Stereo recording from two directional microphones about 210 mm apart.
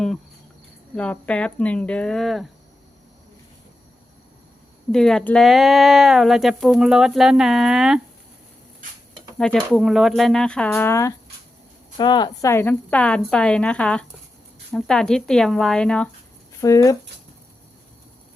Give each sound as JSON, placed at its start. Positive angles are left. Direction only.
{"t": 0.9, "sound": "speech", "side_deg": 5}
{"t": 4.9, "sound": "speech", "side_deg": 0}
{"t": 9.4, "sound": "speech", "side_deg": 0}
{"t": 16.6, "sound": "speech", "side_deg": 15}